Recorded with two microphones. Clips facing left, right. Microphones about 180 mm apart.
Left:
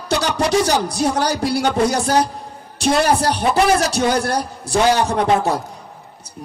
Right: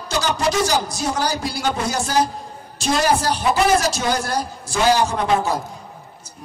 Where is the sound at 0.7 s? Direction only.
65° left (ahead or behind).